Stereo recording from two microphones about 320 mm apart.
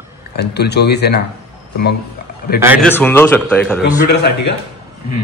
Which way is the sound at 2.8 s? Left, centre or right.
Centre.